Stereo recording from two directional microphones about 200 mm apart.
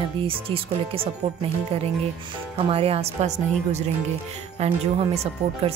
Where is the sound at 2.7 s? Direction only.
30° right (ahead or behind).